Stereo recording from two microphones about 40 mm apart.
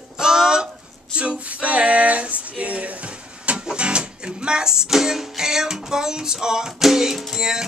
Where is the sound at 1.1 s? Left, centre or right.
Right.